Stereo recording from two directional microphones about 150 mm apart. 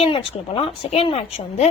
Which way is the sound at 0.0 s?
40° left (ahead or behind).